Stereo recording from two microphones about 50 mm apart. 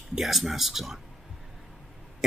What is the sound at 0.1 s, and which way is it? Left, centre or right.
Speech, centre.